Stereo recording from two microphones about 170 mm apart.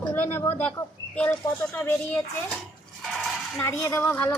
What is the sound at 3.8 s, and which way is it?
Speech, 10° left (ahead or behind).